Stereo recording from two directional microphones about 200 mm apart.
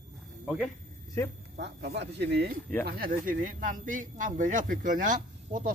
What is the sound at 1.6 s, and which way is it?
Speech, 60° right (ahead or behind).